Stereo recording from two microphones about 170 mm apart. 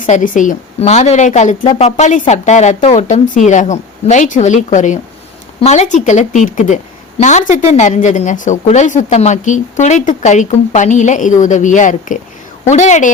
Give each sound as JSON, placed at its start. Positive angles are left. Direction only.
{"t": 0.0, "sound": "speech", "side_deg": 50}